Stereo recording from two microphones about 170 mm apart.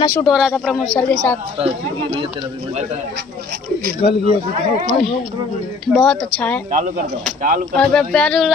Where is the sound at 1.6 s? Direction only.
40° right (ahead or behind).